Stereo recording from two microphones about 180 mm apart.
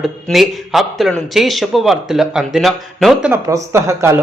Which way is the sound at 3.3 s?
15° right (ahead or behind).